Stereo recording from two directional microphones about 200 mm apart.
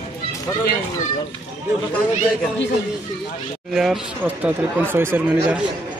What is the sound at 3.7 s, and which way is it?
Speech, 5° right (ahead or behind).